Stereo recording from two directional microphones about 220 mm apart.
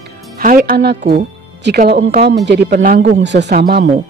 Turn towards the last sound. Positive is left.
turn(degrees=-45)  # may be behind; listen again after turning